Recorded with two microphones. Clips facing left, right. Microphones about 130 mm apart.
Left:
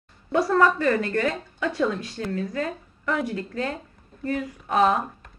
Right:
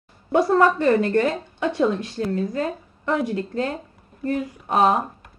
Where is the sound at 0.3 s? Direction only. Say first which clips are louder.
Right 3 dB; 30° right (ahead or behind).